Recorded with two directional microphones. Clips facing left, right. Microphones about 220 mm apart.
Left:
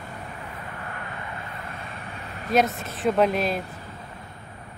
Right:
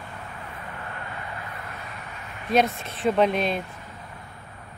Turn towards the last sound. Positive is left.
turn(degrees=0)  # may be behind; listen again after turning